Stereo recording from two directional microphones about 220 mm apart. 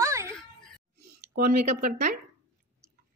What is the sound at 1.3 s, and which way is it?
Speech, 40° right (ahead or behind).